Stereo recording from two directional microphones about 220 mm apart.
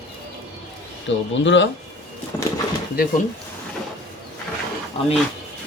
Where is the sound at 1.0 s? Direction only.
55° left (ahead or behind).